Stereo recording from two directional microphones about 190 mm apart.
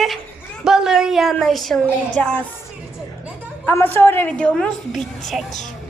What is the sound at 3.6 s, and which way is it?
A woman's voice, 10° left (ahead or behind).